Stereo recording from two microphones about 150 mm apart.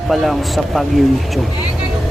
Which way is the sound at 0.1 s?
Centre (ahead or behind).